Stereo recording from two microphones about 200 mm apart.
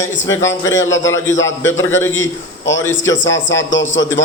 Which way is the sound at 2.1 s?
70° left (ahead or behind).